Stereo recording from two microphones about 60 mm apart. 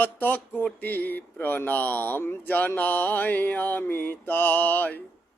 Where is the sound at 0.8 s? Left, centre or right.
Left.